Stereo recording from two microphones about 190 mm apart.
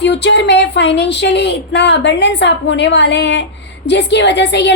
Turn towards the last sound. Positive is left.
turn(degrees=65)  # may be behind; listen again after turning